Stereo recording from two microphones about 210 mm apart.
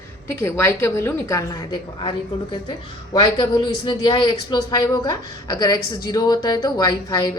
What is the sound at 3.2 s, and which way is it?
Speech, 20° left (ahead or behind).